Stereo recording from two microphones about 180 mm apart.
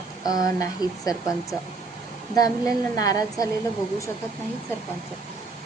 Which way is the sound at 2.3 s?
20° left (ahead or behind).